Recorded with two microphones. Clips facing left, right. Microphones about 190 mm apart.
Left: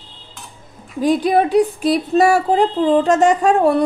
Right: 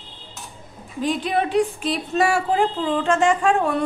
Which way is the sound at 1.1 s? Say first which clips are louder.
Left 7 dB; 40° left (ahead or behind).